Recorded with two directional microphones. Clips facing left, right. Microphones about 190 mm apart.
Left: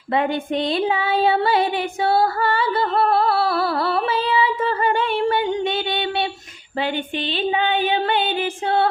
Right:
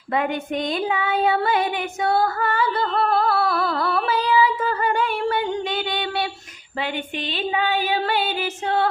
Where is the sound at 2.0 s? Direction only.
30° left (ahead or behind).